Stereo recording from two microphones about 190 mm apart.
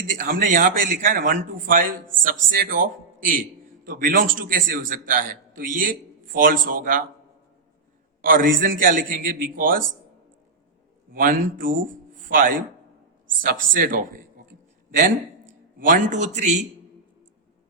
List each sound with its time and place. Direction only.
0.2 s a man's voice: 50° right (ahead or behind)
8.2 s a man's voice: 45° right (ahead or behind)
11.1 s a man's voice: 45° right (ahead or behind)
12.1 s chopping: 45° right (ahead or behind)
13.4 s a man's voice: 45° right (ahead or behind)
14.8 s a sound: 45° right (ahead or behind)
15.8 s a man's voice: 45° right (ahead or behind)